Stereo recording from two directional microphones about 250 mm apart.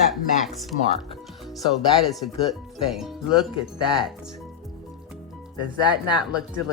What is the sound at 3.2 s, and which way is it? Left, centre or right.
Speech, centre.